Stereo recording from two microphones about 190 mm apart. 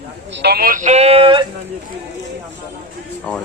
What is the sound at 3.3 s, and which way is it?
Speech, 5° left (ahead or behind).